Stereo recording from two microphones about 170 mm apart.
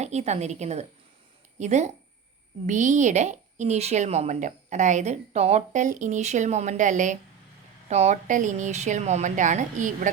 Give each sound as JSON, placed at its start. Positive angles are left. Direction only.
{"t": 0.0, "sound": "a woman's voice", "side_deg": -40}